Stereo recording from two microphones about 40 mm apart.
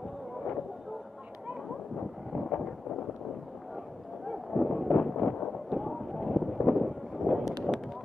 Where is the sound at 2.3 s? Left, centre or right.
Centre.